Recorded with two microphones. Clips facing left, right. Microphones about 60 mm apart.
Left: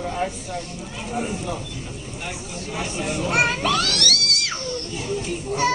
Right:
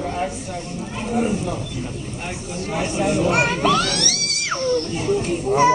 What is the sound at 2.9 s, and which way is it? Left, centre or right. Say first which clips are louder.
Chant: right 8 dB; right.